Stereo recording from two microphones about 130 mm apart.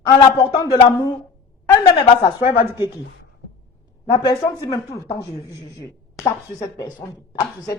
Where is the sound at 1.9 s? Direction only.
35° left (ahead or behind).